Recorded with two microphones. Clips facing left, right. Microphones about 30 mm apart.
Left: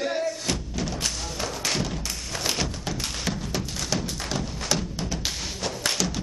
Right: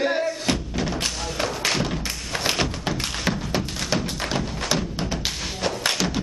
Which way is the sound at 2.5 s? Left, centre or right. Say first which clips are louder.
Right 4 dB; right.